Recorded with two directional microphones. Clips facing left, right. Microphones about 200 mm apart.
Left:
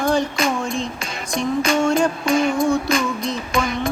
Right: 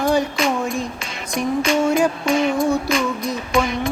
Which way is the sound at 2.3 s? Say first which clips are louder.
Left 2 dB; centre (ahead or behind).